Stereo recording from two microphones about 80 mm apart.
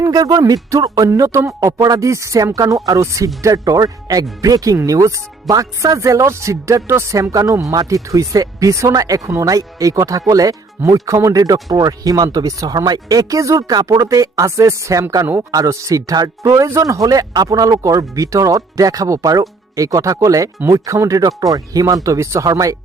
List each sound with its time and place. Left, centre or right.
0.0 s a sound: right
0.3 s speech: right
13.7 s speech: right